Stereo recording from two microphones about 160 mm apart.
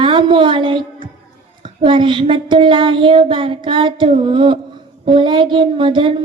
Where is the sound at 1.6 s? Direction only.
30° right (ahead or behind).